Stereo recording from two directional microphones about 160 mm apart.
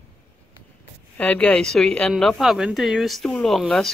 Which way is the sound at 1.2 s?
10° left (ahead or behind).